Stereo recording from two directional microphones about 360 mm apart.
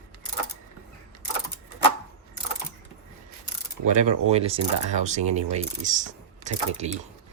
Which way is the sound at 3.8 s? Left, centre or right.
Centre.